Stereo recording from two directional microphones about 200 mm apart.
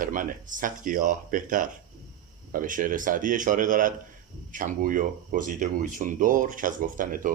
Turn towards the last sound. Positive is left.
turn(degrees=-45)  # may be behind; listen again after turning